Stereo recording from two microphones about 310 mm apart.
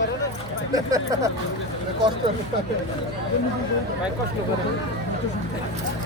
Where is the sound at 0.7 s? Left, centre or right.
Centre.